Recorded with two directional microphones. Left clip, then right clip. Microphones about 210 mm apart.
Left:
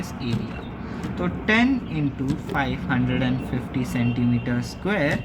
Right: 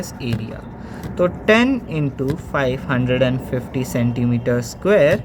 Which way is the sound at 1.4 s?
40° right (ahead or behind).